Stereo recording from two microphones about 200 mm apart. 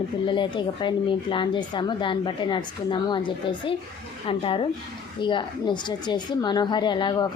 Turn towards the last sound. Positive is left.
turn(degrees=25)  # may be behind; listen again after turning